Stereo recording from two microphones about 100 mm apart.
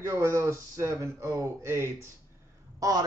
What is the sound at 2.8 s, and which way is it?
Speech, 40° right (ahead or behind).